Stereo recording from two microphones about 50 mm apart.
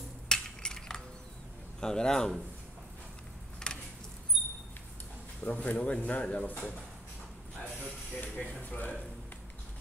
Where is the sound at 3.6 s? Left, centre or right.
Centre.